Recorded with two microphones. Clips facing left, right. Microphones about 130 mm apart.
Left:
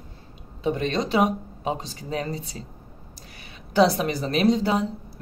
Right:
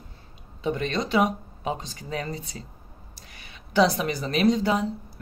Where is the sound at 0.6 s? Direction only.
35° left (ahead or behind).